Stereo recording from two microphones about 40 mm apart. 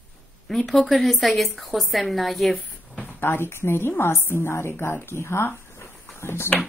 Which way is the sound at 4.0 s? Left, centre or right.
Left.